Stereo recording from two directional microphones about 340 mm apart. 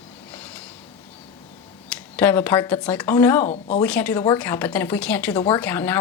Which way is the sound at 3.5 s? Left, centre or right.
Left.